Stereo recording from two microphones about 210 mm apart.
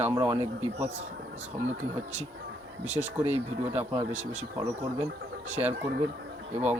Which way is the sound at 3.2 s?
30° right (ahead or behind).